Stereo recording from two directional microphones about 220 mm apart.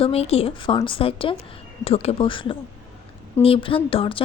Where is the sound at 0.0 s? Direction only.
25° left (ahead or behind).